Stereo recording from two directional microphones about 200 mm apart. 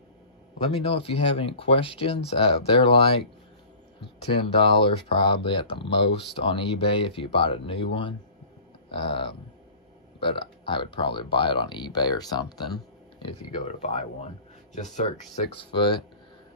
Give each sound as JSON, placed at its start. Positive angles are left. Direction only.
{"t": 0.8, "sound": "speech", "side_deg": 30}
{"t": 13.2, "sound": "speech", "side_deg": 30}